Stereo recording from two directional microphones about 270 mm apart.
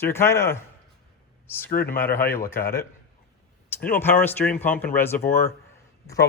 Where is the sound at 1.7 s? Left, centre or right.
Left.